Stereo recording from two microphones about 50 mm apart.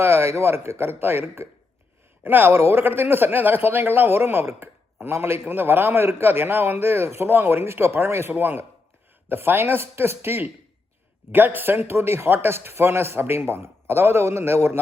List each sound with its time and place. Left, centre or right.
0.0 s a man's voice: right